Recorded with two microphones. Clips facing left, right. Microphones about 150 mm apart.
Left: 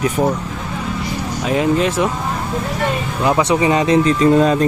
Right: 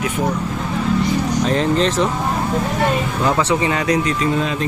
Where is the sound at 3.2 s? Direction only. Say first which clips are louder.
Left 4 dB; 15° left (ahead or behind).